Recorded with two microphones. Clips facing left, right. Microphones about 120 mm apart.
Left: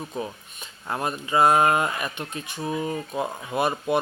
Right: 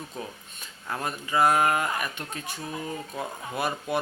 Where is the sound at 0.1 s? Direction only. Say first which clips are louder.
Left 6 dB; 20° left (ahead or behind).